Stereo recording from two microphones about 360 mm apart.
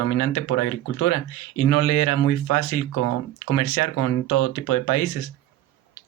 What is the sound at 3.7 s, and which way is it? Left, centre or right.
Speech, left.